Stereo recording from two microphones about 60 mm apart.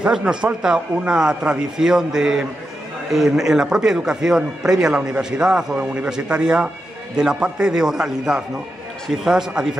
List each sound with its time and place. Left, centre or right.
0.0 s speech: centre